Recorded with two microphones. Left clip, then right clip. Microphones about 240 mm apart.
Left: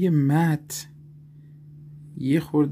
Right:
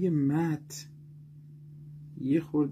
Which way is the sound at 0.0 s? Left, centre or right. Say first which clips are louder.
Left 6 dB; left.